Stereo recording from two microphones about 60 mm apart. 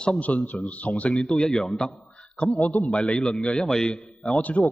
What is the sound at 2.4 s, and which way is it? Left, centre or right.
Speech, centre.